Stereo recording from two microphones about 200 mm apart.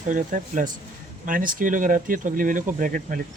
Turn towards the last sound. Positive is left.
turn(degrees=-45)  # may be behind; listen again after turning